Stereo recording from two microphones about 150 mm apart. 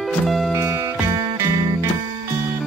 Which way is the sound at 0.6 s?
20° right (ahead or behind).